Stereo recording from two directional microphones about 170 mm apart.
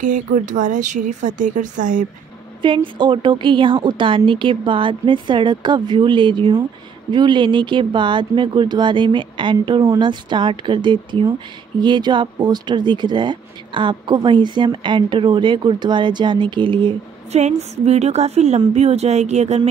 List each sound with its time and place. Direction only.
0.0 s speech: 50° right (ahead or behind)
2.6 s speech: 30° right (ahead or behind)
17.4 s a woman's voice: 40° right (ahead or behind)